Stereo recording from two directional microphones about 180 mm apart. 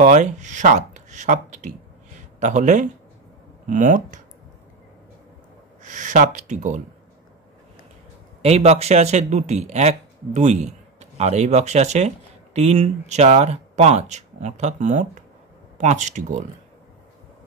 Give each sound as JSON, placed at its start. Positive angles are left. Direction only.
{"t": 0.0, "sound": "speech", "side_deg": -40}
{"t": 5.9, "sound": "speech", "side_deg": -45}
{"t": 8.4, "sound": "speech", "side_deg": -35}